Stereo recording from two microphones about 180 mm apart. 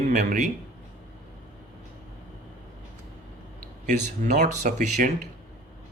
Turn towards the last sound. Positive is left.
turn(degrees=-45)  # may be behind; listen again after turning